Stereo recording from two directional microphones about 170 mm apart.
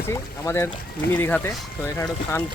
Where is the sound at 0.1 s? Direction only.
15° left (ahead or behind).